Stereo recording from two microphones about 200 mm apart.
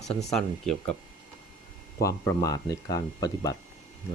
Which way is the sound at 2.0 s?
15° left (ahead or behind).